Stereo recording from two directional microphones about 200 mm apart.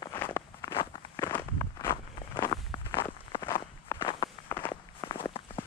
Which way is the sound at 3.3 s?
25° left (ahead or behind).